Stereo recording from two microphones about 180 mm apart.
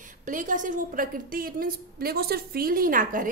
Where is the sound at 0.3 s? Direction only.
45° right (ahead or behind).